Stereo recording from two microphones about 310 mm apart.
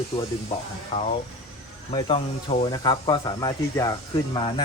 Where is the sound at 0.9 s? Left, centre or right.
Centre.